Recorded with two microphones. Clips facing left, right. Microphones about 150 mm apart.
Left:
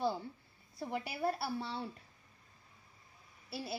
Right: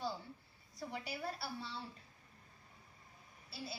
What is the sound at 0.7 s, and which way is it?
A woman's voice, 55° left (ahead or behind).